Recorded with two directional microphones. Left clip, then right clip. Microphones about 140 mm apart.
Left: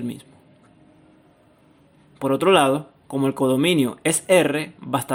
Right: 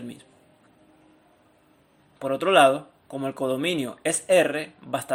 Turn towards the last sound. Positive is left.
turn(degrees=30)  # may be behind; listen again after turning